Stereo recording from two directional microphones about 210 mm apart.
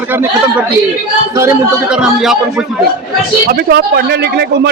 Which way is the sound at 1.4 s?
10° right (ahead or behind).